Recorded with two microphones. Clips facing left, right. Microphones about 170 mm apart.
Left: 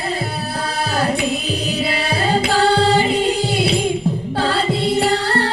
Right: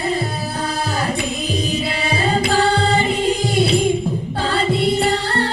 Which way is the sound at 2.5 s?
35° left (ahead or behind).